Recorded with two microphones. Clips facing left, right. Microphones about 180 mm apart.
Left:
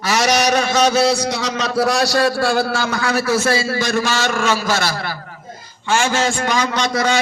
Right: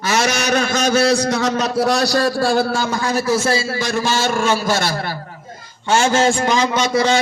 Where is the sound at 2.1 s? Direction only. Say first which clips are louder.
Even; 40° right (ahead or behind).